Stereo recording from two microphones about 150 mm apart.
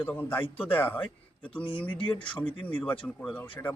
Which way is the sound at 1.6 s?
35° left (ahead or behind).